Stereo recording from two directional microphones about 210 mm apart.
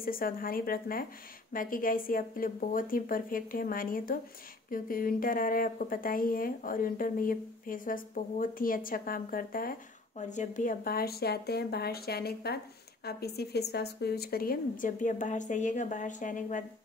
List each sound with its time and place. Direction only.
0.0 s a woman's voice: 45° left (ahead or behind)